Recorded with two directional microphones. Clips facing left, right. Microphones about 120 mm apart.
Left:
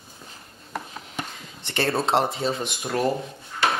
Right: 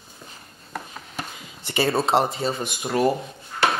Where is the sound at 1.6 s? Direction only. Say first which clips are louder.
Right 2 dB; 5° right (ahead or behind).